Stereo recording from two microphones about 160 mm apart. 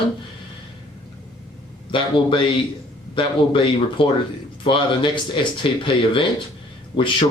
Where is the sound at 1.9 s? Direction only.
30° left (ahead or behind).